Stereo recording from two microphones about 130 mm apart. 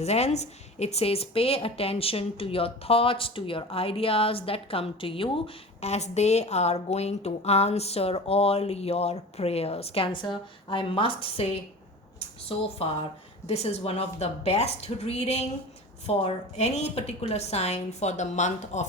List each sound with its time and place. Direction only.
0.0 s a woman's voice: 55° left (ahead or behind)
5.8 s a woman's voice: 60° left (ahead or behind)
12.8 s a woman's voice: 50° left (ahead or behind); by 18.9 s 65° left (ahead or behind)